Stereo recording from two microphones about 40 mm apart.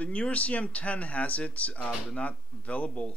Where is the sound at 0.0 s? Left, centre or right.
Left.